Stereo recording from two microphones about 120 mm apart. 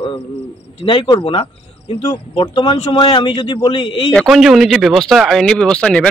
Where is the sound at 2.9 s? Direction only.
45° left (ahead or behind).